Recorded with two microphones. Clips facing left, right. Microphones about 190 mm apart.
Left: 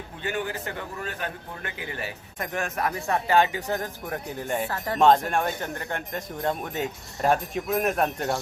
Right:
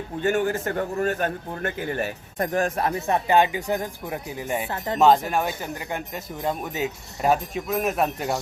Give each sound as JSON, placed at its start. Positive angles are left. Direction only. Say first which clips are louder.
{"t": 0.2, "sound": "a man's voice", "louder": "right 8 dB", "side_deg": -45}